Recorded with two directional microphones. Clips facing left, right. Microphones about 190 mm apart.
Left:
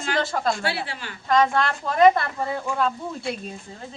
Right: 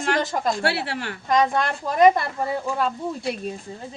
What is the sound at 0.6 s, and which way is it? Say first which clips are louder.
Speech: right 4 dB; 65° right (ahead or behind).